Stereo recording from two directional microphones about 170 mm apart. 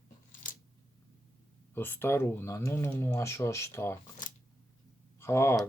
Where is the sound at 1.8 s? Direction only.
15° left (ahead or behind).